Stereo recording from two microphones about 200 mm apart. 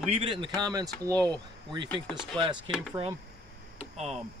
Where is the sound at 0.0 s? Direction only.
30° right (ahead or behind).